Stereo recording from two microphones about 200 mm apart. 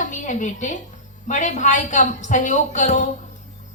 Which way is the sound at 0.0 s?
40° left (ahead or behind).